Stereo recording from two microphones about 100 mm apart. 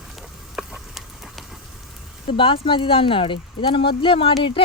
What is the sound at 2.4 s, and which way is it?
Speech, 60° left (ahead or behind).